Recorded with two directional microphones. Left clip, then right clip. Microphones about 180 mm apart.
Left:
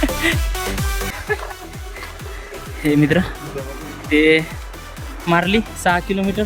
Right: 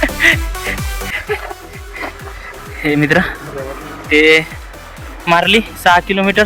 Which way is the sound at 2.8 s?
10° left (ahead or behind).